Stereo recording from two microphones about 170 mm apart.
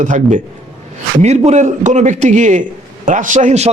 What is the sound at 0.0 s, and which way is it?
Speech, 50° right (ahead or behind).